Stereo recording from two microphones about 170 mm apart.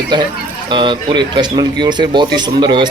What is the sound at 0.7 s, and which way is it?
Speech, 25° right (ahead or behind).